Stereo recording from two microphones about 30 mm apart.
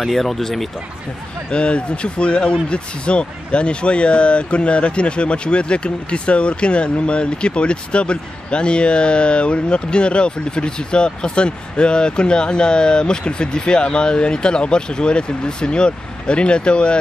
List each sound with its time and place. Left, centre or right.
0.1 s speech: centre
1.5 s speech: left